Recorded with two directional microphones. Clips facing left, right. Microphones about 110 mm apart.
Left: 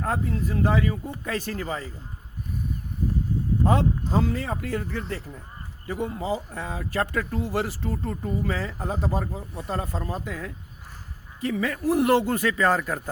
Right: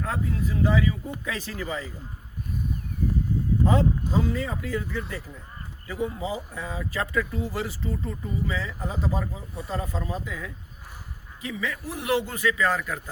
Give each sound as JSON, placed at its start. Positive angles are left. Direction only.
{"t": 0.0, "sound": "speech", "side_deg": 40}
{"t": 0.5, "sound": "speech", "side_deg": 50}
{"t": 3.7, "sound": "speech", "side_deg": 55}